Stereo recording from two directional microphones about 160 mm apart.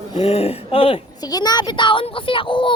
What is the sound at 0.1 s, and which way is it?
A woman's voice, 40° left (ahead or behind).